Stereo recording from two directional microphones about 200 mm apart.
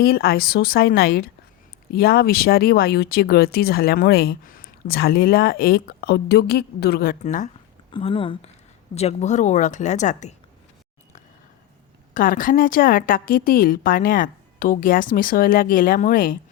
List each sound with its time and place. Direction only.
0.0 s speech: 45° left (ahead or behind)
7.9 s speech: 25° left (ahead or behind)
12.1 s speech: 45° left (ahead or behind)